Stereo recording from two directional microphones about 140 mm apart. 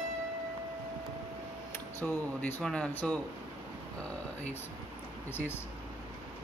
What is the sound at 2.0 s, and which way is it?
Speech, 10° left (ahead or behind).